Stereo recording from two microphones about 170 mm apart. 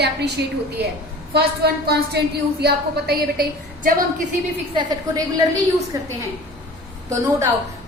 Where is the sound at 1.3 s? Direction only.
70° right (ahead or behind).